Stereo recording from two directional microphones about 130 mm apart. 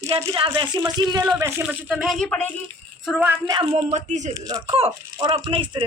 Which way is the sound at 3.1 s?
15° right (ahead or behind).